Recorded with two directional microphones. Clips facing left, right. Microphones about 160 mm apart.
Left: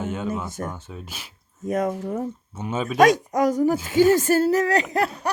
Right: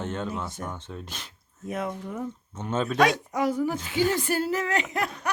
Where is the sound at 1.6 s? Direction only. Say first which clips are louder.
Left 7 dB; 45° left (ahead or behind).